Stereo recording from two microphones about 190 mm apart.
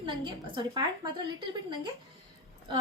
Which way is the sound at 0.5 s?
25° right (ahead or behind).